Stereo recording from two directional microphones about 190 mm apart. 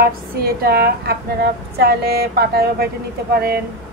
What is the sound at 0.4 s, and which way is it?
A woman's voice, 55° right (ahead or behind).